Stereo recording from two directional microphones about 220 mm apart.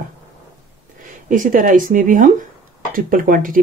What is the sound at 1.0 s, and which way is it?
Speech, 35° right (ahead or behind).